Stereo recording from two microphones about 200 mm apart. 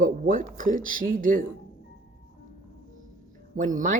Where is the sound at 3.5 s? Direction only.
40° right (ahead or behind).